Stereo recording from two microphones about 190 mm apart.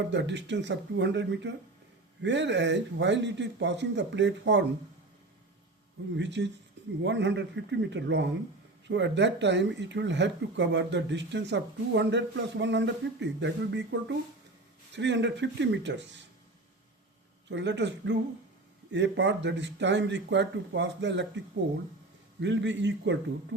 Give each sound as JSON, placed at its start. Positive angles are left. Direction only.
{"t": 0.1, "sound": "speech", "side_deg": -70}
{"t": 6.1, "sound": "speech", "side_deg": -70}
{"t": 17.5, "sound": "speech", "side_deg": -65}